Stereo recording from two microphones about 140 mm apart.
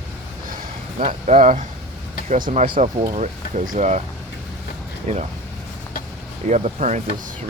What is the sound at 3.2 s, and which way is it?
Speech, 65° right (ahead or behind).